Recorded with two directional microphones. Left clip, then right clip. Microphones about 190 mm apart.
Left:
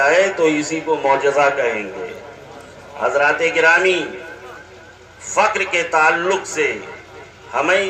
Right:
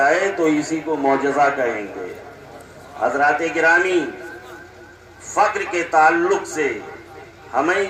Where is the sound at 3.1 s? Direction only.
25° right (ahead or behind).